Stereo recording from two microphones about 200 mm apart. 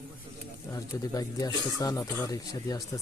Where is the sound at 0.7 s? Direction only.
15° left (ahead or behind).